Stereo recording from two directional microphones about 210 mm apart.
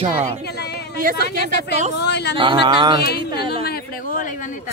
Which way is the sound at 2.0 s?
55° left (ahead or behind).